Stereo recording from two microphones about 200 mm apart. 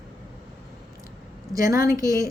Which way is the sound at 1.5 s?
15° right (ahead or behind).